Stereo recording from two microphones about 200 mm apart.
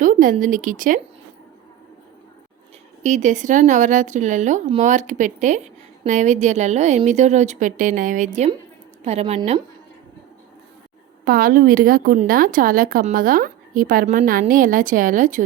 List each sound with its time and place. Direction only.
0.0 s a woman's voice: 40° right (ahead or behind)
3.0 s a woman's voice: 35° right (ahead or behind)
11.3 s a woman's voice: 45° right (ahead or behind)